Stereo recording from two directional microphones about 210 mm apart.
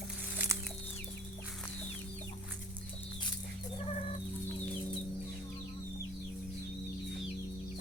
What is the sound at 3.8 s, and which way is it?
Chicken, 30° left (ahead or behind).